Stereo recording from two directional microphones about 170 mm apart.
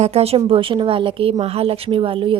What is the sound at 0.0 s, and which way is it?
A woman's voice, 40° right (ahead or behind).